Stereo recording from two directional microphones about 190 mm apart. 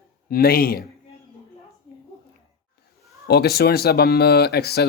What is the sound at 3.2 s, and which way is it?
Speech, 55° left (ahead or behind).